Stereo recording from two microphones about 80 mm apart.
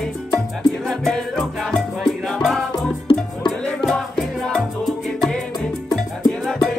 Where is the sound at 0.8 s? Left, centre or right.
Centre.